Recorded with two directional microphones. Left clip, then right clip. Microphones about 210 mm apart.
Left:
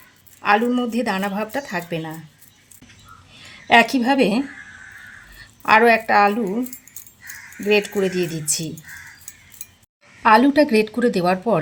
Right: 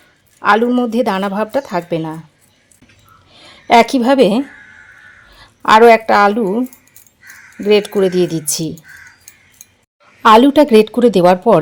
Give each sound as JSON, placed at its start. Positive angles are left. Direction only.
{"t": 0.3, "sound": "a woman's voice", "side_deg": -30}
{"t": 3.7, "sound": "speech", "side_deg": -35}
{"t": 5.6, "sound": "speech", "side_deg": -35}
{"t": 7.6, "sound": "speech", "side_deg": -40}
{"t": 10.2, "sound": "a woman's voice", "side_deg": -30}